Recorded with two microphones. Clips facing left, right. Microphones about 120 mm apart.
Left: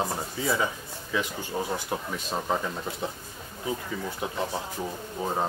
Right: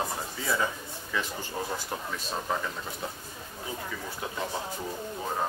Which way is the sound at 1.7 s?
20° left (ahead or behind).